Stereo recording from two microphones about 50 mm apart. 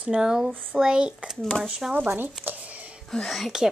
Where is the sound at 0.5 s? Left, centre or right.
Centre.